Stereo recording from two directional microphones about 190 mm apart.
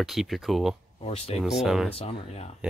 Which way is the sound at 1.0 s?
30° left (ahead or behind).